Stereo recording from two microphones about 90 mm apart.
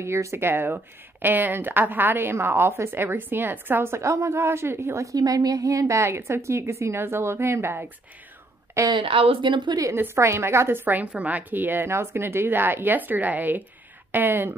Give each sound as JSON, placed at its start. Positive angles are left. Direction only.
{"t": 0.0, "sound": "speech", "side_deg": -30}
{"t": 8.9, "sound": "speech", "side_deg": -75}
{"t": 9.9, "sound": "speech", "side_deg": -25}